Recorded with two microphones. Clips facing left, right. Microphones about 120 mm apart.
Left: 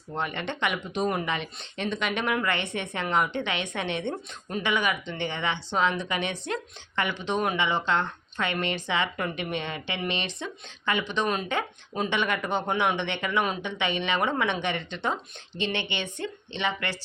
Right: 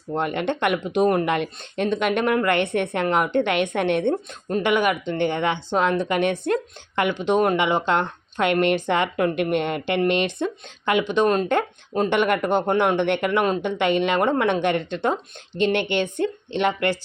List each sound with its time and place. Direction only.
0.2 s speech: 50° right (ahead or behind)